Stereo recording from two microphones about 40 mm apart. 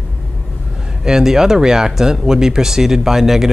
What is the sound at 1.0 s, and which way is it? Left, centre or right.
Speech, centre.